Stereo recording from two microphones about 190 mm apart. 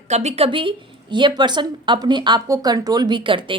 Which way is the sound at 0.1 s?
35° right (ahead or behind).